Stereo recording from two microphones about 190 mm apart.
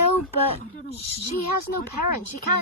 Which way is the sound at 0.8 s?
35° left (ahead or behind).